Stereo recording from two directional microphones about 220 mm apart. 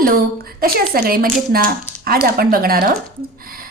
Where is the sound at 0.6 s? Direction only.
45° right (ahead or behind).